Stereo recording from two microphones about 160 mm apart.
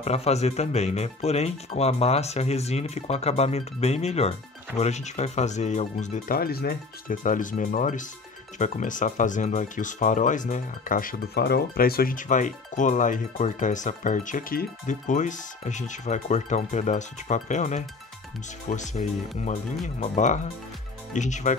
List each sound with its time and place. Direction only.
0.0 s speech: 40° left (ahead or behind)
6.3 s speech: 70° left (ahead or behind); by 21.5 s 50° left (ahead or behind)